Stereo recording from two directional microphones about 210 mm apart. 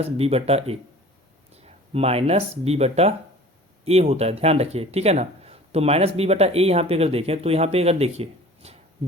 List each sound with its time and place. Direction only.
0.0 s speech: 30° right (ahead or behind)